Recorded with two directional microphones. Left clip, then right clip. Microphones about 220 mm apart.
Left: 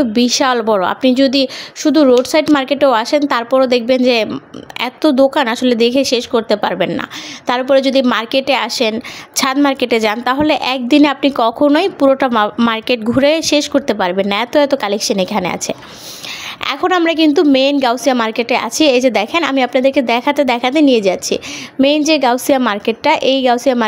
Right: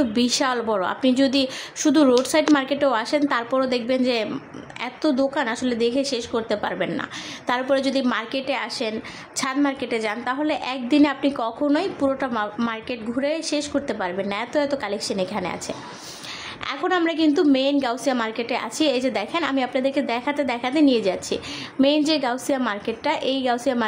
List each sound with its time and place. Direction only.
0.0 s a woman's voice: 30° left (ahead or behind)